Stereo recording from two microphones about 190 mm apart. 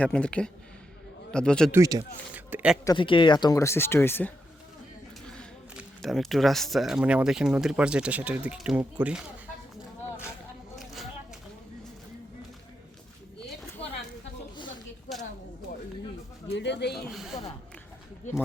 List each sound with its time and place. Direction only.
0.0 s speech: 5° left (ahead or behind)
1.7 s speech: 20° right (ahead or behind)
2.3 s speech: 5° right (ahead or behind)
2.8 s speech: 25° left (ahead or behind); by 9.2 s 5° right (ahead or behind)
10.8 s a sound: centre (ahead or behind)
13.8 s a sound: 30° left (ahead or behind)
16.5 s speech: 65° left (ahead or behind)
17.1 s speech: centre (ahead or behind)